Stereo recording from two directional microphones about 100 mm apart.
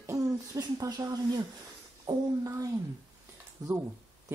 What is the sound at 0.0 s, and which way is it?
Speech, 35° right (ahead or behind).